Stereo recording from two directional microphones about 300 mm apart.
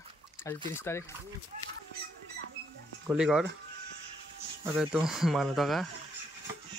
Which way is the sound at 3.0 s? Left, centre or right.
Centre.